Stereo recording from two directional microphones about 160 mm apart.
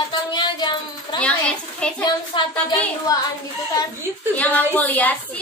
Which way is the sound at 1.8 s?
5° left (ahead or behind).